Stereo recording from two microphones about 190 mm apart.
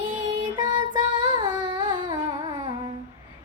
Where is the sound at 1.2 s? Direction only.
25° right (ahead or behind).